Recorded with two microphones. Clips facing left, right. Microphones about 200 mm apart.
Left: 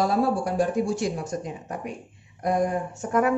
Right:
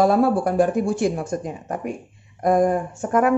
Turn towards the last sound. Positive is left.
turn(degrees=-50)  # may be behind; listen again after turning